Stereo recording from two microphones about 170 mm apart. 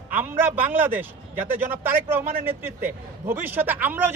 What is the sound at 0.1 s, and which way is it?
A man's voice, 10° right (ahead or behind).